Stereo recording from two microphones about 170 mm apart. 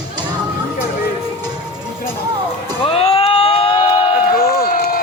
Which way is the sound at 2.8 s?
35° left (ahead or behind).